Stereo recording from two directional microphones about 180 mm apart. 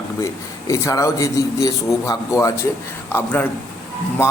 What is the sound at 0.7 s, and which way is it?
A man's voice, 15° left (ahead or behind).